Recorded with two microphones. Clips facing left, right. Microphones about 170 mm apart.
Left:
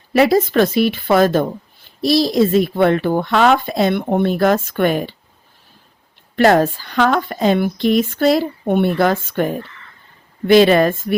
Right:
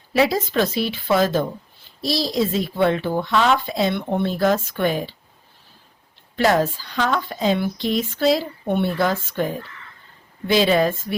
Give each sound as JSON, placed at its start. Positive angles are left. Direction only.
{"t": 0.1, "sound": "speech", "side_deg": 60}
{"t": 6.3, "sound": "speech", "side_deg": 60}